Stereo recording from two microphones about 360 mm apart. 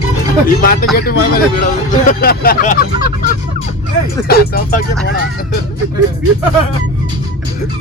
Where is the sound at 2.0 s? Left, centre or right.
Left.